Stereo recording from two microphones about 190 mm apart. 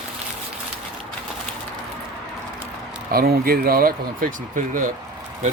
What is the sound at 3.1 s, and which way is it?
Speech, 50° right (ahead or behind).